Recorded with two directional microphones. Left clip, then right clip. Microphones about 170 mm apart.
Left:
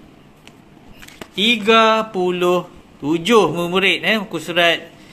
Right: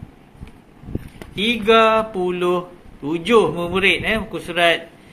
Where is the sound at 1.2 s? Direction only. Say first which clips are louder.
Left 4 dB; 25° left (ahead or behind).